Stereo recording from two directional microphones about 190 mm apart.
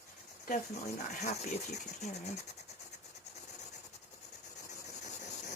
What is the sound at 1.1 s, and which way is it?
Speech, 35° left (ahead or behind).